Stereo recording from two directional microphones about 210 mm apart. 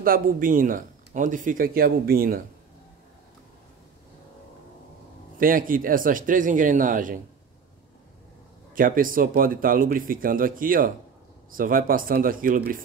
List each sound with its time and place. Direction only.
0.0 s speech: 40° right (ahead or behind)
5.4 s speech: 40° right (ahead or behind)
8.7 s speech: 40° right (ahead or behind)